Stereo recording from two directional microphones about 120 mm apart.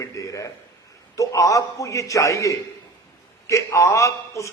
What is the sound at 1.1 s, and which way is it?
A man's voice, 30° left (ahead or behind).